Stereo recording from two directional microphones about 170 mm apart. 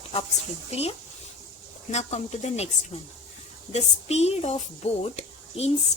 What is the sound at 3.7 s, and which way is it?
Speech, 40° left (ahead or behind).